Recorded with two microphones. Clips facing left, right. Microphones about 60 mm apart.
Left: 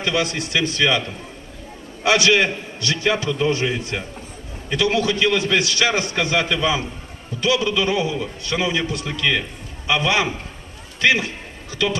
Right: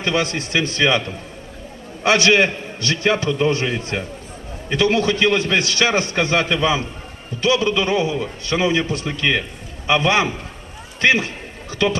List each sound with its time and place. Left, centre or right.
0.0 s a man's voice: right
2.0 s a man's voice: right